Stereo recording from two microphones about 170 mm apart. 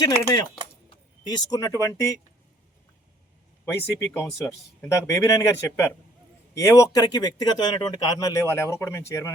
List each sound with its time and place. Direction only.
0.0 s speech: 20° left (ahead or behind)
3.7 s speech: 15° left (ahead or behind)